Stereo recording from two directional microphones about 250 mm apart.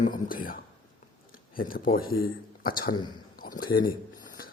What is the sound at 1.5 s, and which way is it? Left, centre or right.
Speech, left.